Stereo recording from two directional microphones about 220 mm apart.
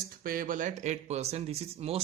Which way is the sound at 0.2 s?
40° right (ahead or behind).